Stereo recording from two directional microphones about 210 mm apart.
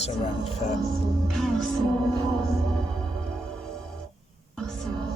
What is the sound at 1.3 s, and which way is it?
Music, centre (ahead or behind).